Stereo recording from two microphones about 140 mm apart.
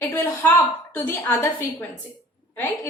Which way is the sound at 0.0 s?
15° left (ahead or behind).